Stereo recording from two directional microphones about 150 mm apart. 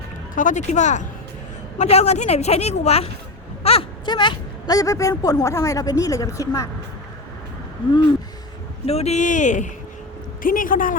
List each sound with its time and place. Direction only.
0.3 s speech: 55° left (ahead or behind); by 6.7 s 20° left (ahead or behind)
8.9 s speech: 45° left (ahead or behind)
10.4 s speech: 65° left (ahead or behind)